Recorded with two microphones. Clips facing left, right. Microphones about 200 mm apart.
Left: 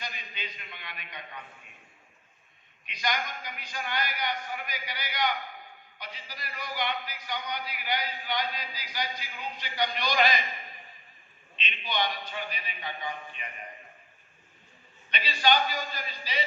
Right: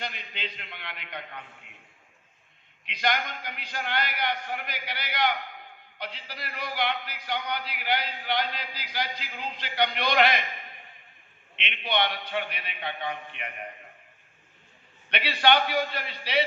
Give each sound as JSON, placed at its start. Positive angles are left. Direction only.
{"t": 0.0, "sound": "a man's voice", "side_deg": -65}
{"t": 2.8, "sound": "a man's voice", "side_deg": -65}
{"t": 11.5, "sound": "a man's voice", "side_deg": -65}
{"t": 15.1, "sound": "a man's voice", "side_deg": -65}